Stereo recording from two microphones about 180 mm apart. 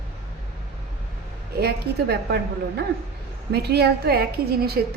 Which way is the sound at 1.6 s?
65° right (ahead or behind).